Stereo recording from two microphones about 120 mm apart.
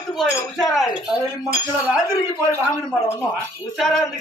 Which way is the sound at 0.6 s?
Centre (ahead or behind).